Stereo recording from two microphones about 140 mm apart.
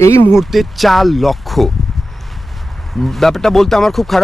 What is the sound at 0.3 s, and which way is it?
Speech, centre (ahead or behind).